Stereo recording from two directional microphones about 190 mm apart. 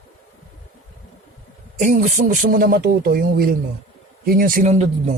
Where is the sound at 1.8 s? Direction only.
45° right (ahead or behind).